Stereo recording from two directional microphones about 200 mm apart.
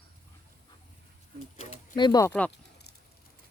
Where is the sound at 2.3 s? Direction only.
5° left (ahead or behind).